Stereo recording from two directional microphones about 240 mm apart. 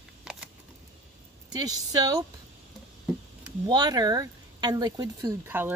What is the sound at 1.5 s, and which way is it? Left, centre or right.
Speech, centre.